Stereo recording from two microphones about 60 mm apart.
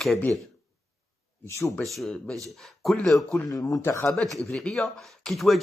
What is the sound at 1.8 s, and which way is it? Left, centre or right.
Speech, centre.